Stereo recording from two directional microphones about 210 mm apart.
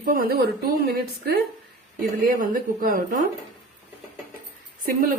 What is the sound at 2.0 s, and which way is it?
A woman's voice, 40° right (ahead or behind).